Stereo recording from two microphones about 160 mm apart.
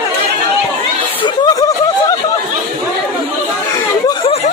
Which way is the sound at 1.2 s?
25° left (ahead or behind).